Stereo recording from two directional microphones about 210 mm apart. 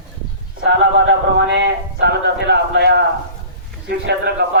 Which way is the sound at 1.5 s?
55° right (ahead or behind).